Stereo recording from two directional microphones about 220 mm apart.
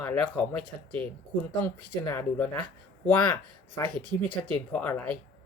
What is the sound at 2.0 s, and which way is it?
Speech, 10° left (ahead or behind).